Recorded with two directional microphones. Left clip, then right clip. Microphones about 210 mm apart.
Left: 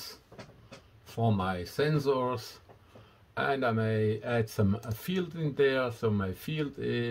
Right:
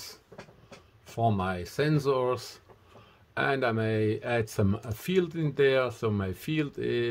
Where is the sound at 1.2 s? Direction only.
30° right (ahead or behind).